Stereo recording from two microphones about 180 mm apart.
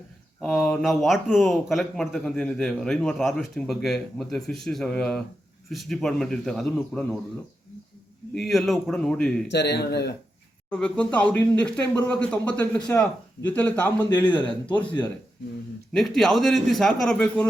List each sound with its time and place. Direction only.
0.4 s speech: centre (ahead or behind)
8.4 s speech: centre (ahead or behind)
9.5 s a man's voice: 70° left (ahead or behind)
10.7 s speech: 5° left (ahead or behind)
14.1 s a man's voice: 25° left (ahead or behind)
14.7 s speech: 10° left (ahead or behind)